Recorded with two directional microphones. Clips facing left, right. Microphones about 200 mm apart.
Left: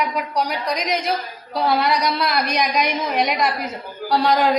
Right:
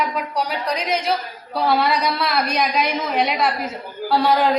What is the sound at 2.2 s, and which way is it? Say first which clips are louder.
Speech: even; 5° right (ahead or behind).